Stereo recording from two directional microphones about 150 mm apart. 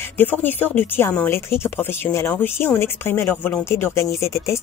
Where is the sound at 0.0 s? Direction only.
15° left (ahead or behind).